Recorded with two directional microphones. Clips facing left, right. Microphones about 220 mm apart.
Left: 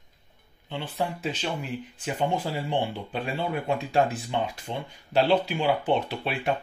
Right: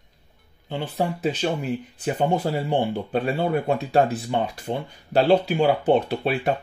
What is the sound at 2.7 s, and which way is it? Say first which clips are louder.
Speech: right 5 dB; 45° right (ahead or behind).